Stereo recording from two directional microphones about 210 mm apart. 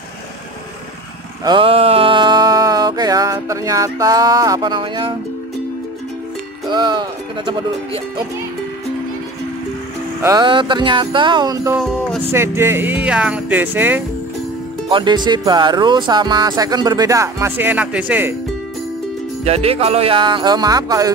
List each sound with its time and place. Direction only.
1.4 s a sound: 20° right (ahead or behind)
6.7 s speech: 20° right (ahead or behind)
10.2 s music: 20° right (ahead or behind)
11.7 s music: centre (ahead or behind)
12.3 s speech: 10° right (ahead or behind)
14.9 s music: 20° right (ahead or behind)
19.4 s music: 30° right (ahead or behind)